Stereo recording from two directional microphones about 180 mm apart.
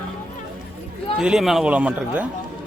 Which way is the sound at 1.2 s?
5° right (ahead or behind).